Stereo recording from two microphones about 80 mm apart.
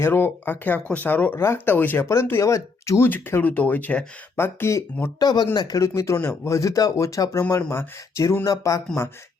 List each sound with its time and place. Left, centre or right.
0.0 s speech: left
3.1 s speech: left
4.4 s speech: left
5.2 s speech: left
5.8 s speech: left